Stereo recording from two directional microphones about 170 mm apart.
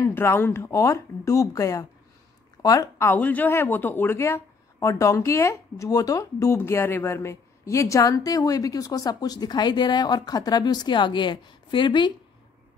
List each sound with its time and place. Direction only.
0.0 s speech: 15° left (ahead or behind)